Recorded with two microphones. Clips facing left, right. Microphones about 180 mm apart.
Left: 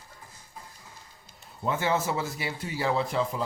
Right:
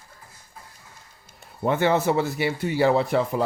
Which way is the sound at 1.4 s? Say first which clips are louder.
Right 7 dB; 65° right (ahead or behind).